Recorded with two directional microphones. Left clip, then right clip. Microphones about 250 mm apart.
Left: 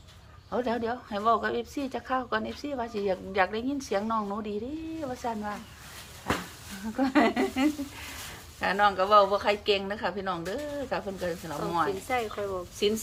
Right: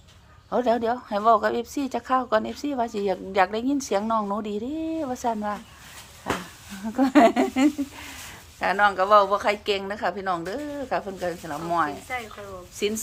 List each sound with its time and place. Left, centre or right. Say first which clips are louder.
0.5 s speech: right 7 dB; right
6.9 s speech: right 7 dB; right
12.0 s a woman's voice: left 3 dB; left
12.8 s speech: right 1 dB; centre